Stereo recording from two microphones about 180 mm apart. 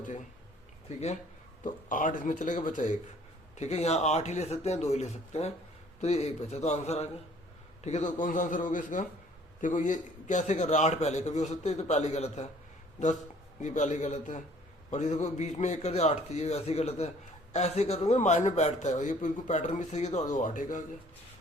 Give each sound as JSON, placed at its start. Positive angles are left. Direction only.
{"t": 0.9, "sound": "a man's voice", "side_deg": 40}
{"t": 13.6, "sound": "a man's voice", "side_deg": 40}